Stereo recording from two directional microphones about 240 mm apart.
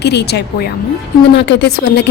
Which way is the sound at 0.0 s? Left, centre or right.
Left.